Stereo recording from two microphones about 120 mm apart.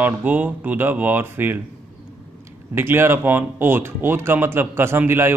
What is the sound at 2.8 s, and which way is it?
A man's voice, 20° right (ahead or behind).